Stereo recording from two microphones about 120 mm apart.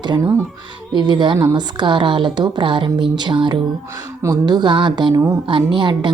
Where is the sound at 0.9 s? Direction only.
40° right (ahead or behind).